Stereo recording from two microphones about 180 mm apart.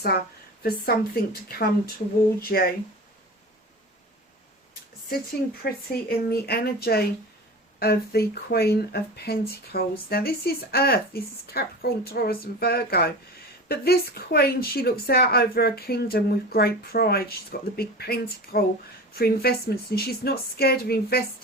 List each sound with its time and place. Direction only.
0.1 s speech: 65° left (ahead or behind)
5.6 s speech: 60° left (ahead or behind)